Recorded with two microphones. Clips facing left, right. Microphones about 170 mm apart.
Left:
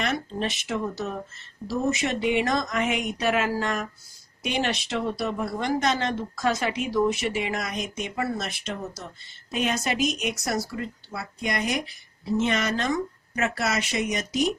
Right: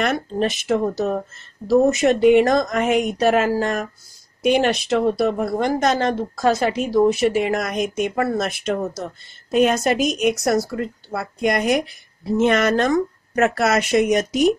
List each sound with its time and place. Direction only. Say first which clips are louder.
0.0 s speech: right 7 dB; 50° right (ahead or behind)